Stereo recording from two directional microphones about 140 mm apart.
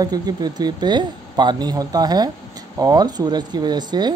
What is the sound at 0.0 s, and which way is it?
Speech, 30° right (ahead or behind).